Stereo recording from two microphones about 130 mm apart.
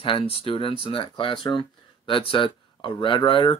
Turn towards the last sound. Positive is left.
turn(degrees=40)  # may be behind; listen again after turning